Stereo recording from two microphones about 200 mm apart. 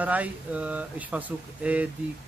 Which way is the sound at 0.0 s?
5° right (ahead or behind).